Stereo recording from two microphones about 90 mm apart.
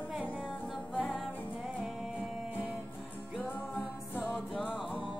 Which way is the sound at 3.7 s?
15° left (ahead or behind).